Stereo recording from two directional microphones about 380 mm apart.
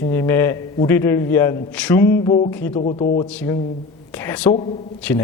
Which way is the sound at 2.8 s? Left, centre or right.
Centre.